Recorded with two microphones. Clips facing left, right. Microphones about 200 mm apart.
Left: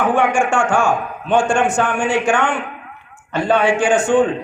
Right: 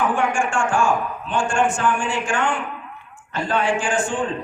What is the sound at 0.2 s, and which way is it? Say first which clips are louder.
Speech: left 5 dB; 70° left (ahead or behind).